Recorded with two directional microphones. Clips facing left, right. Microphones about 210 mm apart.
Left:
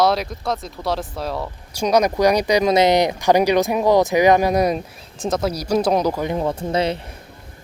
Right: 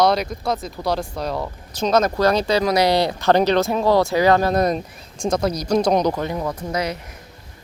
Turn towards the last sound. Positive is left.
turn(degrees=30)  # may be behind; listen again after turning